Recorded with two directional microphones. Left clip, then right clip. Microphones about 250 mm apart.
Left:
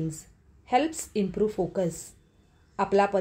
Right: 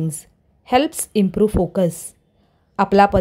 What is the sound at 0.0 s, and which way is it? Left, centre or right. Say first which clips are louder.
A woman's voice: right 6 dB; right.